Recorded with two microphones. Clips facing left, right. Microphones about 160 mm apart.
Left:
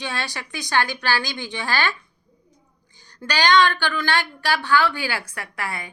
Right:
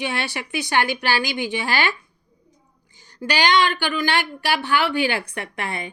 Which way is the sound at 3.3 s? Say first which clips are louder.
Left 1 dB; 15° right (ahead or behind).